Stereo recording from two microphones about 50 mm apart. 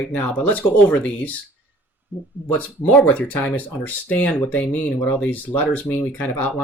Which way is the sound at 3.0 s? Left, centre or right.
Left.